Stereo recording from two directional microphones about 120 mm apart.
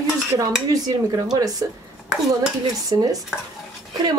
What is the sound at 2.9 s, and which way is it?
Speech, 40° right (ahead or behind).